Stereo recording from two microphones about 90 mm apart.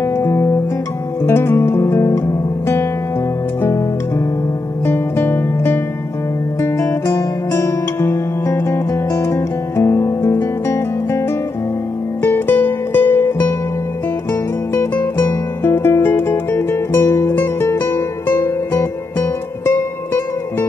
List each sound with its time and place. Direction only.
0.0 s music: 30° left (ahead or behind)
1.2 s guitar: 25° left (ahead or behind)
4.8 s music: 25° left (ahead or behind)
12.2 s music: 25° left (ahead or behind)
14.7 s music: 25° left (ahead or behind)